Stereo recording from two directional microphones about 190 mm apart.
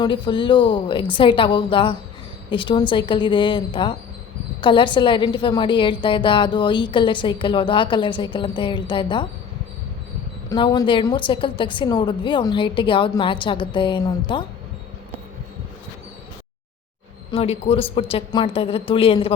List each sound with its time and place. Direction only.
0.0 s a woman's voice: 25° left (ahead or behind)
10.5 s a woman's voice: 20° left (ahead or behind)
17.3 s a woman's voice: 30° left (ahead or behind)